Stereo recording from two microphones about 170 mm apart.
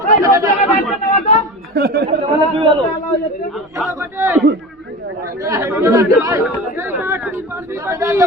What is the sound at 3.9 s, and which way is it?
A man's voice, 15° right (ahead or behind).